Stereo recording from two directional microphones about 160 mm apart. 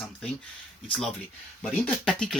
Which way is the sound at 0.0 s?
5° left (ahead or behind).